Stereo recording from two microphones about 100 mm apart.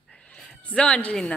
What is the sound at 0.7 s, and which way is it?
Speech, 10° left (ahead or behind).